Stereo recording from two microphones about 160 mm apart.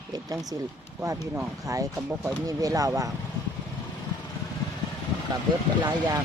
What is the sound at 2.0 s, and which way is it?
Speech, 10° right (ahead or behind).